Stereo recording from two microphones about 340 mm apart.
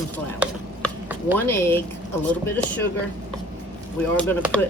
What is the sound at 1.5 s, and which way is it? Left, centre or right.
Speech, centre.